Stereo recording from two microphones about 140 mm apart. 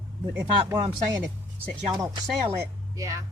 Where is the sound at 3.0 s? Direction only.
25° right (ahead or behind).